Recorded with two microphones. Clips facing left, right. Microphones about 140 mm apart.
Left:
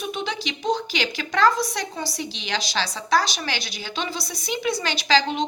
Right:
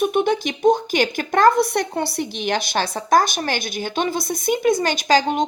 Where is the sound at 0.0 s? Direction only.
55° right (ahead or behind).